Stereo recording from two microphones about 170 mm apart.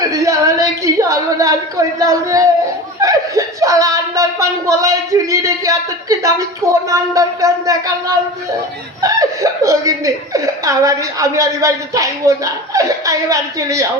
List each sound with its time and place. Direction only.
0.1 s a woman's voice: 20° right (ahead or behind)